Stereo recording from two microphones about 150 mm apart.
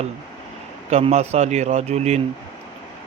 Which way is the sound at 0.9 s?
45° right (ahead or behind).